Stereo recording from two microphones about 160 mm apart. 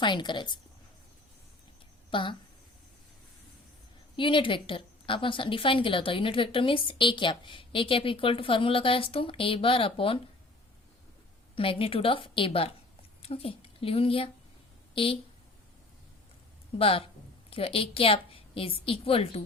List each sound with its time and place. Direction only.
0.0 s a woman's voice: 30° left (ahead or behind)
2.0 s speech: 30° left (ahead or behind)
4.2 s a woman's voice: 30° left (ahead or behind)
11.5 s a woman's voice: 35° left (ahead or behind)
16.7 s a woman's voice: 35° left (ahead or behind)